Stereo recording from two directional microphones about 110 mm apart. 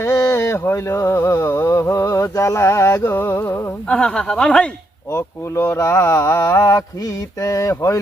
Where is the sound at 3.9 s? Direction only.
5° left (ahead or behind).